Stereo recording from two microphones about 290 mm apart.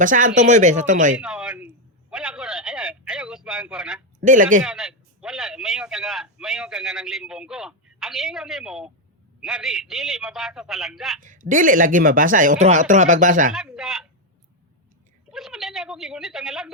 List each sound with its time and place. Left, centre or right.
0.0 s a man's voice: right
1.1 s a sound: centre
4.2 s speech: right
4.6 s a sound: centre
9.4 s a man's voice: centre
11.2 s a man's voice: right
13.5 s a man's voice: centre
15.3 s a man's voice: centre